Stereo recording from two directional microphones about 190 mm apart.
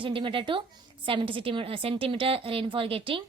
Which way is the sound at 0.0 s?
25° right (ahead or behind).